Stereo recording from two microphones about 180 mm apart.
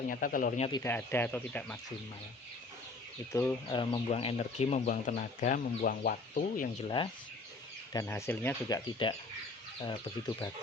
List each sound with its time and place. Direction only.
0.1 s speech: 50° left (ahead or behind)
0.8 s speech: 10° left (ahead or behind)
3.3 s speech: 20° left (ahead or behind); by 6.7 s 55° left (ahead or behind)
6.8 s speech: 25° left (ahead or behind)
7.9 s speech: 15° left (ahead or behind)
9.0 s speech: 25° left (ahead or behind)